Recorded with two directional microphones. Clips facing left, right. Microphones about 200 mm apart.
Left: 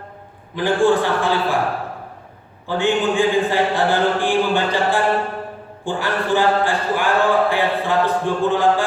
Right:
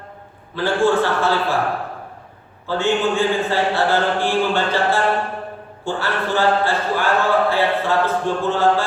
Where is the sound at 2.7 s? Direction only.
15° left (ahead or behind).